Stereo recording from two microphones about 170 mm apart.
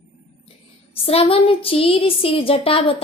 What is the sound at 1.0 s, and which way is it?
Speech, 35° left (ahead or behind).